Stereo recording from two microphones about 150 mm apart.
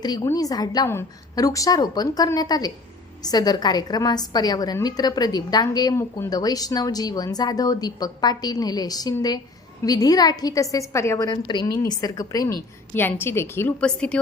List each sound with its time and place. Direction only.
0.0 s a woman's voice: 25° left (ahead or behind)
13.0 s a woman's voice: 15° left (ahead or behind)